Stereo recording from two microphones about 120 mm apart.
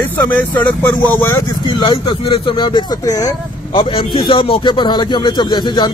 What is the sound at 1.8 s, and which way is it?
Speech, 45° left (ahead or behind).